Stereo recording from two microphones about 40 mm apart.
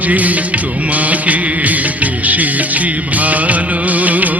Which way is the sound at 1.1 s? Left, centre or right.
Right.